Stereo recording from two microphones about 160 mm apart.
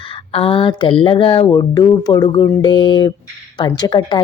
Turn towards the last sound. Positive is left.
turn(degrees=25)  # may be behind; listen again after turning